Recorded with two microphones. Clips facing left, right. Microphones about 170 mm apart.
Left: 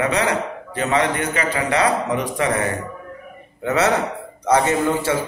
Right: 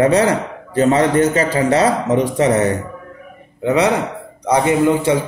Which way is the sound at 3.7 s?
15° right (ahead or behind).